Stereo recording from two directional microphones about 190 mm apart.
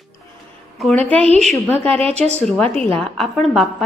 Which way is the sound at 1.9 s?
30° right (ahead or behind).